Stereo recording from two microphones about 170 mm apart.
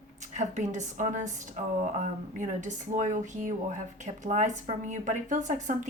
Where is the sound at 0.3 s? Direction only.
45° right (ahead or behind).